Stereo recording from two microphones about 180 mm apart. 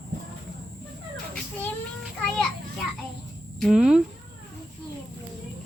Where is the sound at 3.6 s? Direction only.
Centre (ahead or behind).